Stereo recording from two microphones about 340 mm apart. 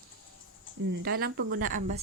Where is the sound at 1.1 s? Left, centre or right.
Right.